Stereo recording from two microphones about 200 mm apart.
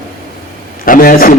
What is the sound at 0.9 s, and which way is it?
Speech, 45° left (ahead or behind).